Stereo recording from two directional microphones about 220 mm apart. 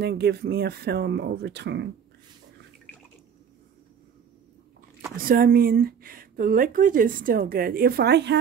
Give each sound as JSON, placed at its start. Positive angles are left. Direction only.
{"t": 0.0, "sound": "speech", "side_deg": -45}
{"t": 5.1, "sound": "speech", "side_deg": -40}